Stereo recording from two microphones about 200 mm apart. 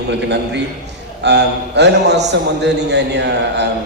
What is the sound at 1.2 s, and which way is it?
A man's voice, 60° right (ahead or behind).